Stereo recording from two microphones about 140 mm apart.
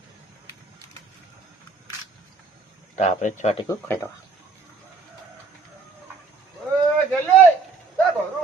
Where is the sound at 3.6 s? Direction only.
15° left (ahead or behind).